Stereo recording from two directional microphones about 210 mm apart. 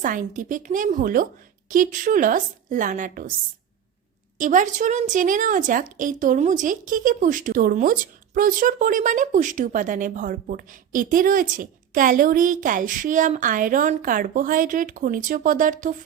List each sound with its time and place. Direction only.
0.0 s a woman's voice: 40° right (ahead or behind)
4.4 s a woman's voice: 40° right (ahead or behind)